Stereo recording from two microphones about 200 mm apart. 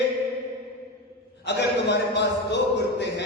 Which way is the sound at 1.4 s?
60° left (ahead or behind).